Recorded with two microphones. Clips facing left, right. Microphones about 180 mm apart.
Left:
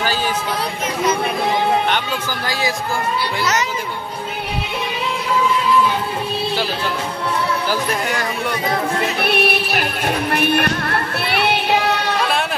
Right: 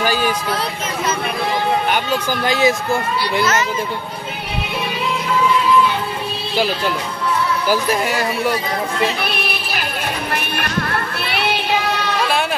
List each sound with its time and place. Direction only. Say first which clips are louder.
0.0 s a sound: right 3 dB; 15° right (ahead or behind)
2.4 s speech: right 7 dB; 20° right (ahead or behind)
7.6 s speech: right 3 dB; 10° right (ahead or behind)
9.2 s music: left 6 dB; 65° left (ahead or behind)
10.3 s music: left 7 dB; 55° left (ahead or behind)